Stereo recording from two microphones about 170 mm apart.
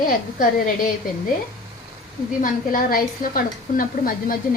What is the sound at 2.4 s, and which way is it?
A woman's voice, 55° left (ahead or behind).